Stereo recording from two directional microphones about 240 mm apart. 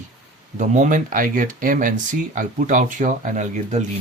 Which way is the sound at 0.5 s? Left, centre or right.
Right.